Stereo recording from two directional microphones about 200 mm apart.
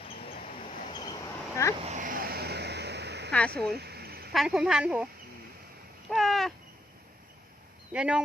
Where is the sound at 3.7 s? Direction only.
55° right (ahead or behind).